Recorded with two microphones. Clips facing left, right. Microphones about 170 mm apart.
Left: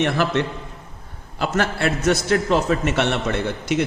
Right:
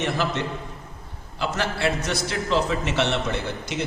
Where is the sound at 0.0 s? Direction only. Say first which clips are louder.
Left 5 dB; 65° left (ahead or behind).